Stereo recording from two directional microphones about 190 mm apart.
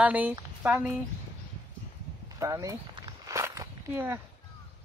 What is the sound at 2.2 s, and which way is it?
Walk, 15° right (ahead or behind).